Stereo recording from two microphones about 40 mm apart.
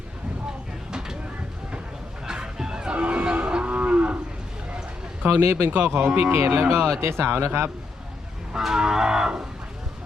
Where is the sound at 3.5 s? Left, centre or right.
Right.